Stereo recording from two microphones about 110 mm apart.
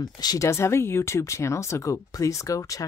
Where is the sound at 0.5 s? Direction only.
25° left (ahead or behind).